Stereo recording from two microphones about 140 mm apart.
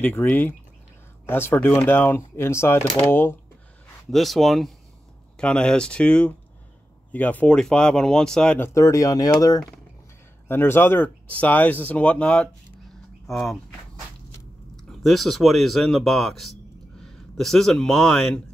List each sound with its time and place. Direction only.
0.0 s speech: 15° left (ahead or behind)
4.1 s speech: centre (ahead or behind); by 9.6 s 25° left (ahead or behind)
10.5 s speech: 15° left (ahead or behind)
14.9 s speech: centre (ahead or behind)